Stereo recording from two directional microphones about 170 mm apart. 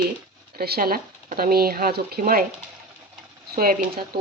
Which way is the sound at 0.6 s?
65° right (ahead or behind).